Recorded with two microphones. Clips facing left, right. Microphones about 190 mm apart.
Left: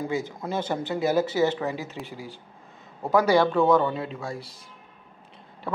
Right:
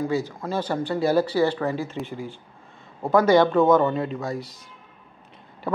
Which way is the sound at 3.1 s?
5° left (ahead or behind).